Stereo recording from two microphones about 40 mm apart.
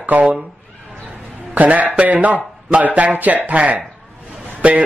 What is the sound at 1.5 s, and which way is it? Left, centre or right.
A man's voice, right.